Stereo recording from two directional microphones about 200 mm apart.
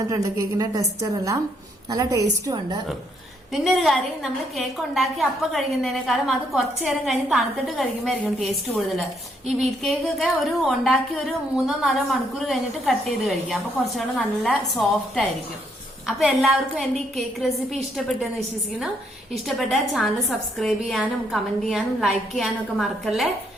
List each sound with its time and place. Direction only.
0.1 s a woman's voice: 15° right (ahead or behind)
3.5 s a woman's voice: centre (ahead or behind)